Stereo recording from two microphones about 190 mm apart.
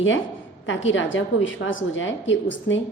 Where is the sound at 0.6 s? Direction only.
85° left.